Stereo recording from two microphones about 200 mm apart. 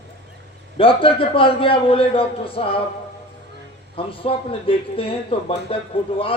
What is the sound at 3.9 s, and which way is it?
A man's voice, 25° left (ahead or behind).